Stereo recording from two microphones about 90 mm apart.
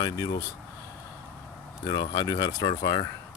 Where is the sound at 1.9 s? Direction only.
55° left (ahead or behind).